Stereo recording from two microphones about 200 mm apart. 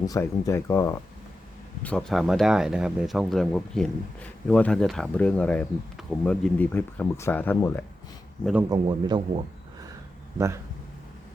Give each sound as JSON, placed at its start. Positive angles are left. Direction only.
{"t": 0.0, "sound": "speech", "side_deg": 15}
{"t": 8.7, "sound": "speech", "side_deg": -20}